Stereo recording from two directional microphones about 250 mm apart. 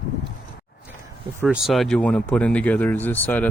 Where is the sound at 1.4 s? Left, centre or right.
Centre.